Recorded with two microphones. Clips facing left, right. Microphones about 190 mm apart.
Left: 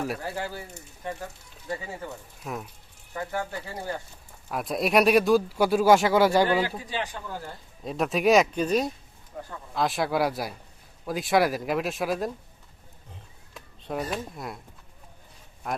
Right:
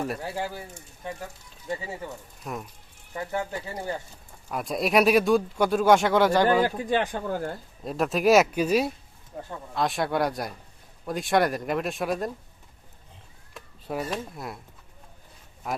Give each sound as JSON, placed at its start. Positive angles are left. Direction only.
{"t": 0.4, "sound": "speech", "side_deg": -10}
{"t": 2.4, "sound": "speech", "side_deg": 0}
{"t": 3.2, "sound": "speech", "side_deg": -20}
{"t": 4.5, "sound": "speech", "side_deg": 0}
{"t": 6.4, "sound": "speech", "side_deg": -45}
{"t": 7.9, "sound": "speech", "side_deg": 0}
{"t": 13.5, "sound": "speech", "side_deg": -5}
{"t": 15.6, "sound": "speech", "side_deg": 0}